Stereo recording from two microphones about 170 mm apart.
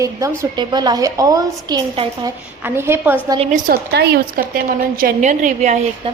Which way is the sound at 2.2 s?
15° right (ahead or behind).